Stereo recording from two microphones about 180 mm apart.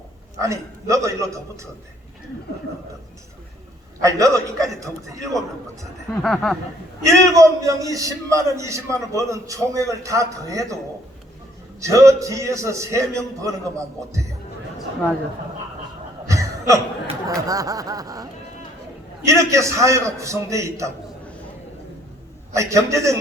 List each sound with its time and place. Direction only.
0.3 s a man's voice: 15° right (ahead or behind)
4.0 s a man's voice: 15° right (ahead or behind)
6.2 s speech: 5° left (ahead or behind)
7.0 s a man's voice: 15° right (ahead or behind)
11.8 s a man's voice: 15° right (ahead or behind)
16.2 s cough: 15° right (ahead or behind)
17.2 s a sound: 20° right (ahead or behind)
19.2 s a man's voice: 15° right (ahead or behind)
22.5 s a man's voice: 15° right (ahead or behind)